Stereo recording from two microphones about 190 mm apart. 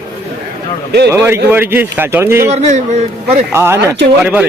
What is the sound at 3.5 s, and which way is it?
Speech, 15° right (ahead or behind).